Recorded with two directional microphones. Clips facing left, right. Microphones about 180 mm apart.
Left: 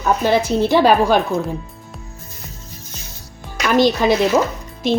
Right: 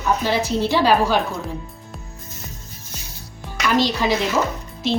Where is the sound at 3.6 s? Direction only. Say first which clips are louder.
Left 5 dB; 50° left (ahead or behind).